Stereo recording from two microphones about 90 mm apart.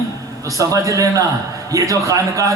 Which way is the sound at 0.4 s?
35° right (ahead or behind).